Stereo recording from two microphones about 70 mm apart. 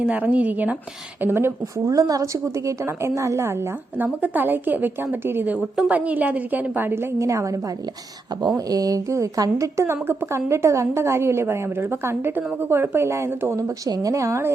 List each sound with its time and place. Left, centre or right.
0.0 s a woman's voice: centre
1.2 s a woman's voice: right
1.9 s a woman's voice: right
3.9 s a woman's voice: right
5.5 s a woman's voice: centre; by 7.6 s right
8.4 s a woman's voice: right
9.7 s a woman's voice: right
13.6 s a woman's voice: right